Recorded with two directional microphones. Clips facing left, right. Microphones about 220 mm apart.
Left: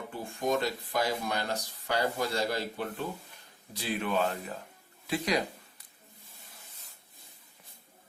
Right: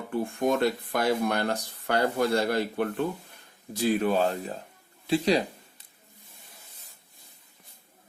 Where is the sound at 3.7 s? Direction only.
40° right (ahead or behind).